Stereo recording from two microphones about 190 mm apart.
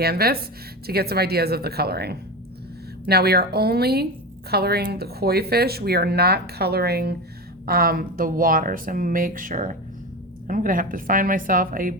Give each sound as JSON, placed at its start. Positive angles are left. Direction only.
{"t": 0.0, "sound": "speech", "side_deg": -55}